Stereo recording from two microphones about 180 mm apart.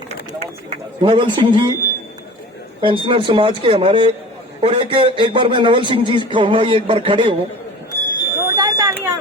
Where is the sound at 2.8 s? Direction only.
30° right (ahead or behind).